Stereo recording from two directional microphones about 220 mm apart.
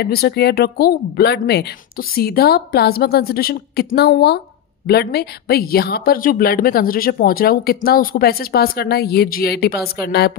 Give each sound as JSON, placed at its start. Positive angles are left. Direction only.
{"t": 0.0, "sound": "speech", "side_deg": 45}